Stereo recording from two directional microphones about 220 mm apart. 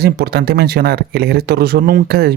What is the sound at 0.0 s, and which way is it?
Speech, 45° right (ahead or behind).